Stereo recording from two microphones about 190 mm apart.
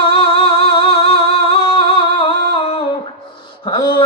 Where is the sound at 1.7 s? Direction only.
30° left (ahead or behind).